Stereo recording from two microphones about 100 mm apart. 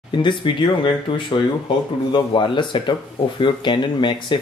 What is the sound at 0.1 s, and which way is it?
Speech, 55° left (ahead or behind).